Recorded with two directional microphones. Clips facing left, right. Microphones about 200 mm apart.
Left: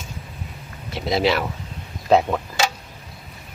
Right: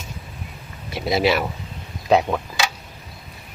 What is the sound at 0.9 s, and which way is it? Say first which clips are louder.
Speech: right 1 dB; 10° right (ahead or behind).